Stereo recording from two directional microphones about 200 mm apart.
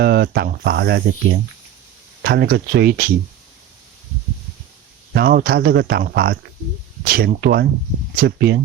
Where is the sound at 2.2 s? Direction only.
50° right (ahead or behind).